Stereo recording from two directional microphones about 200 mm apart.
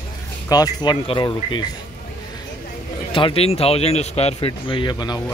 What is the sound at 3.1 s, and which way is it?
Speech, 25° left (ahead or behind).